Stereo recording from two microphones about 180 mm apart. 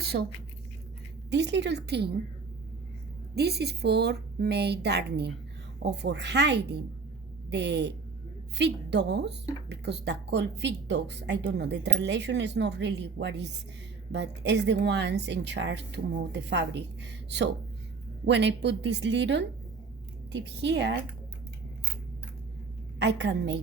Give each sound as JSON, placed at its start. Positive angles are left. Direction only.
{"t": 0.0, "sound": "a sound", "side_deg": -65}
{"t": 1.3, "sound": "speech", "side_deg": -75}
{"t": 3.3, "sound": "a woman's voice", "side_deg": -65}
{"t": 23.0, "sound": "speech", "side_deg": -75}